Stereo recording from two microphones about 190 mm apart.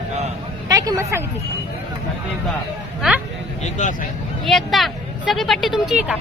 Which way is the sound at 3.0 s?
Centre (ahead or behind).